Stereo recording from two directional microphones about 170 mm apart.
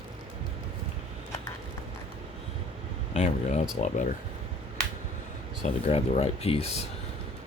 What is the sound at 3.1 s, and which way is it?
Speech, 40° left (ahead or behind).